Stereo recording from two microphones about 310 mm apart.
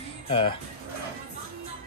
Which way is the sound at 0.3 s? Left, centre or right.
Centre.